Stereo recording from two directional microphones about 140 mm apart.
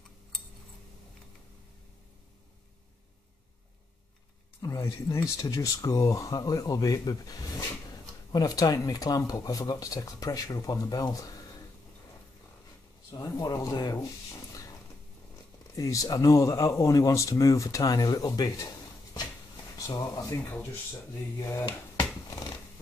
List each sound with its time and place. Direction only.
4.6 s speech: 20° left (ahead or behind)
13.1 s speech: 25° left (ahead or behind)
15.7 s speech: 25° left (ahead or behind)
19.9 s speech: 25° left (ahead or behind)